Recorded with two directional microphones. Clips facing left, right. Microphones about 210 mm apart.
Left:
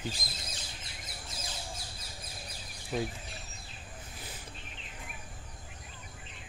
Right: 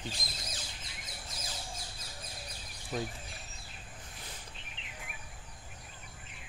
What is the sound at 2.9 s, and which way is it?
Speech, 5° left (ahead or behind).